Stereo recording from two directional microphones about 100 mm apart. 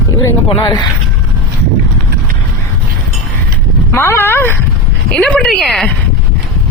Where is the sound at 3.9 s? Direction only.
25° left (ahead or behind).